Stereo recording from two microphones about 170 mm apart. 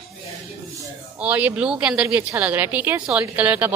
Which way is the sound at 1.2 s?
10° right (ahead or behind).